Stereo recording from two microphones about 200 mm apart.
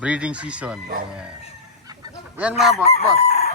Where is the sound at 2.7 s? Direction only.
30° left (ahead or behind).